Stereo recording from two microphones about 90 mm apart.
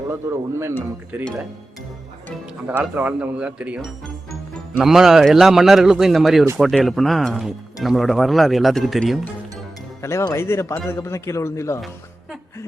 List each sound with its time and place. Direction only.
0.1 s speech: 30° right (ahead or behind)
2.6 s speech: 15° right (ahead or behind)
4.8 s speech: 5° right (ahead or behind)
10.0 s speech: 30° left (ahead or behind)